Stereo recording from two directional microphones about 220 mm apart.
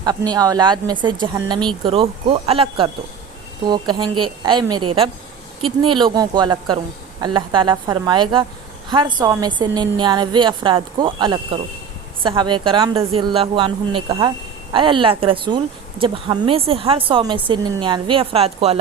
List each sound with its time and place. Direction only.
0.0 s a woman's voice: 20° right (ahead or behind)